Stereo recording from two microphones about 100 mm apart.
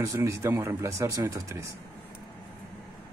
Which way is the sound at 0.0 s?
30° right (ahead or behind).